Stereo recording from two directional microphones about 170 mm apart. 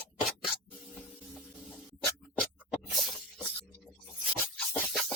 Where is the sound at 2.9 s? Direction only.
Centre (ahead or behind).